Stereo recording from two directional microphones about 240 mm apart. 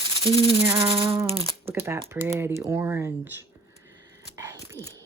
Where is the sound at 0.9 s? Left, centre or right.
Right.